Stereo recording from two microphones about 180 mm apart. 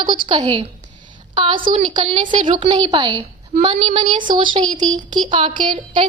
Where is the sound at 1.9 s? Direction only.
25° right (ahead or behind).